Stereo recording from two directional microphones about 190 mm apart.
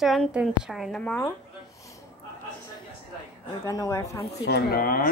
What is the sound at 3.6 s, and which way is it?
Speech, 15° left (ahead or behind).